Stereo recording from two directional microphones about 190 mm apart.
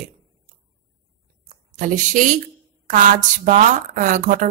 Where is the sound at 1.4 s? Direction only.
45° right (ahead or behind).